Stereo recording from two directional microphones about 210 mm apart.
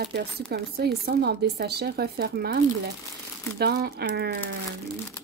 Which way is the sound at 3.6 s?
50° right (ahead or behind).